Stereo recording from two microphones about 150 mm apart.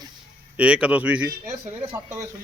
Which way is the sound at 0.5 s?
10° right (ahead or behind).